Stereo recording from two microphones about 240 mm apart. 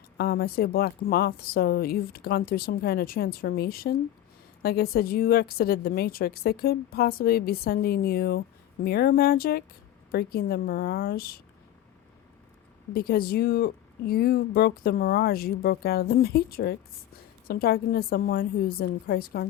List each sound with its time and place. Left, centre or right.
0.2 s a woman's voice: left
12.9 s a woman's voice: left